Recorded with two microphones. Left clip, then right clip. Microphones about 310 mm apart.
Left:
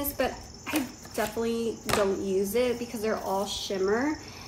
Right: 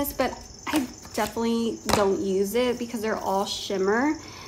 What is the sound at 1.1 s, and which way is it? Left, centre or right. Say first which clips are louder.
Speech: right 3 dB; right.